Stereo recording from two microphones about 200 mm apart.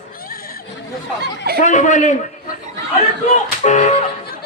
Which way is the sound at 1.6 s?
40° left (ahead or behind).